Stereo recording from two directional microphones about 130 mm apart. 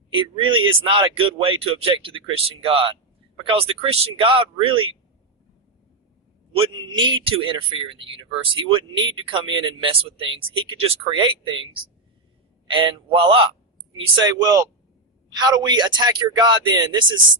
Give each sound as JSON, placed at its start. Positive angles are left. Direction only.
{"t": 0.1, "sound": "speech", "side_deg": -40}
{"t": 6.5, "sound": "speech", "side_deg": -45}
{"t": 12.6, "sound": "speech", "side_deg": -40}